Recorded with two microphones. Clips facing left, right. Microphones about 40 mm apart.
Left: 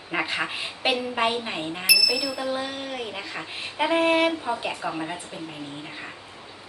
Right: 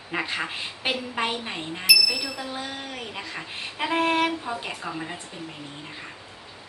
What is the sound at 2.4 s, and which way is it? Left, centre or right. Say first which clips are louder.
Speech: left 5 dB; left.